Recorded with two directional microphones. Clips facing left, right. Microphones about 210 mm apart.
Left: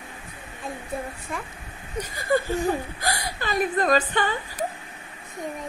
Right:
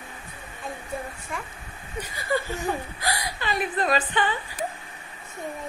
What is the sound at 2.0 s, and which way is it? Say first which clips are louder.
Speech: left 4 dB; 45° left (ahead or behind).